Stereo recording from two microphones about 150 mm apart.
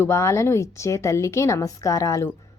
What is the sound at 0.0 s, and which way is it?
A woman's voice, 20° left (ahead or behind).